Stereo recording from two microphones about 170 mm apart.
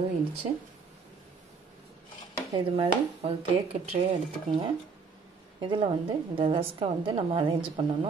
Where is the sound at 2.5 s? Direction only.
30° right (ahead or behind).